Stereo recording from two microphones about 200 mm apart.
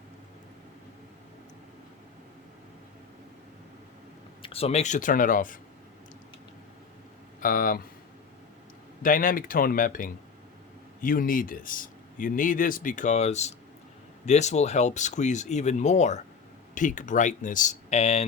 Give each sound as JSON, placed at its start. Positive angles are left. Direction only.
{"t": 4.4, "sound": "speech", "side_deg": 30}
{"t": 7.4, "sound": "speech", "side_deg": 45}
{"t": 9.0, "sound": "speech", "side_deg": 45}